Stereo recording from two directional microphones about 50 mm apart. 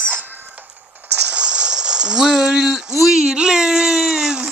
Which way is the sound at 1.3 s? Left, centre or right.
Centre.